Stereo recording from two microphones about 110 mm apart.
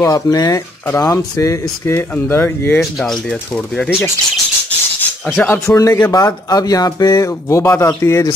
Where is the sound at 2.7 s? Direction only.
Centre (ahead or behind).